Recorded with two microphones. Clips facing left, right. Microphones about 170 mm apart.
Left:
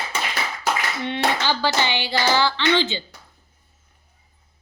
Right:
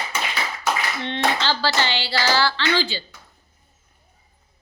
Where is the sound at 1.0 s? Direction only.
10° left (ahead or behind).